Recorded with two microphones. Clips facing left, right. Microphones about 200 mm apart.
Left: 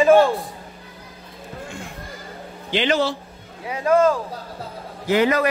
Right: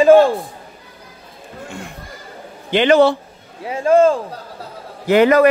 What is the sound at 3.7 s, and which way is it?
Speech, 30° right (ahead or behind).